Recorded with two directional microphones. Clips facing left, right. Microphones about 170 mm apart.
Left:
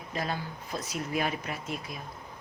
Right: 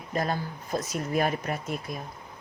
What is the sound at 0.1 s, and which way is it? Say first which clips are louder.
Speech: right 5 dB; 45° right (ahead or behind).